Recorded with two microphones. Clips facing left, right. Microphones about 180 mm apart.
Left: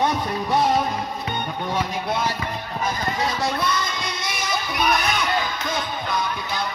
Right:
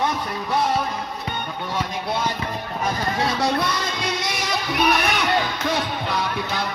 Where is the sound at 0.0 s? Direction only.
20° left (ahead or behind).